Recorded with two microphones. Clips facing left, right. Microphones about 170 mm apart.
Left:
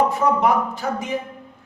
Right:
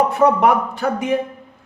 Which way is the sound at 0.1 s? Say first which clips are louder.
Right 4 dB; 65° right (ahead or behind).